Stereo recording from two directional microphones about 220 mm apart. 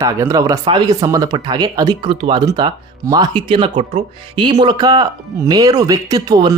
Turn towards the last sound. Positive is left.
turn(degrees=-15)  # may be behind; listen again after turning